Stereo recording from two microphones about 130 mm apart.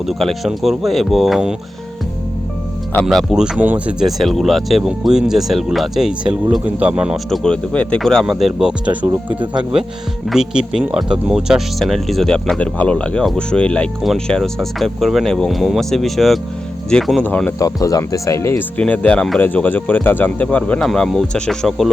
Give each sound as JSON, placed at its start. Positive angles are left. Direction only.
{"t": 0.0, "sound": "speech", "side_deg": 0}
{"t": 3.1, "sound": "speech", "side_deg": 0}
{"t": 4.0, "sound": "speech", "side_deg": 0}
{"t": 7.3, "sound": "speech", "side_deg": 5}
{"t": 10.2, "sound": "speech", "side_deg": -5}
{"t": 17.6, "sound": "speech", "side_deg": 25}
{"t": 18.8, "sound": "speech", "side_deg": 10}